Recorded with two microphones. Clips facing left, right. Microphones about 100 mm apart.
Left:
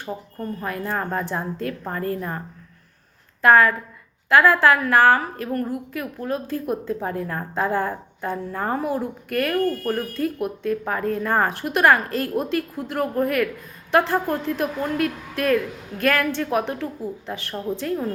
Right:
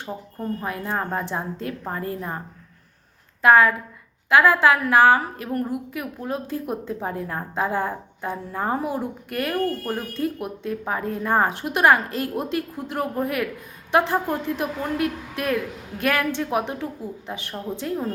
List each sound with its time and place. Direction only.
0.0 s a woman's voice: 20° right (ahead or behind)
3.4 s a woman's voice: 15° right (ahead or behind)